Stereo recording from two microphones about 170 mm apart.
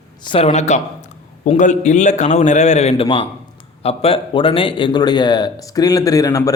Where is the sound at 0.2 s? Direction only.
30° left (ahead or behind).